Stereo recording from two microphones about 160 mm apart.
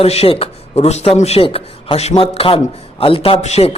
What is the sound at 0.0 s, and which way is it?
A man's voice, 40° left (ahead or behind).